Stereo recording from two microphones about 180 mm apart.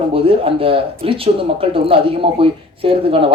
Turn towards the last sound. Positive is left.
turn(degrees=-30)  # may be behind; listen again after turning